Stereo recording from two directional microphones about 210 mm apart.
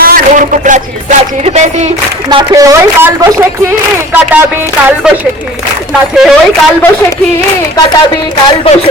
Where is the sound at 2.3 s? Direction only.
20° right (ahead or behind).